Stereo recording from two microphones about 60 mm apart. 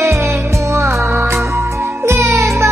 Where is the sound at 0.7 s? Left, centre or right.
Right.